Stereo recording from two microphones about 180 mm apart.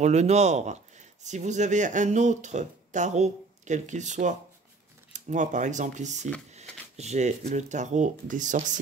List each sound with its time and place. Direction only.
0.0 s speech: 40° right (ahead or behind)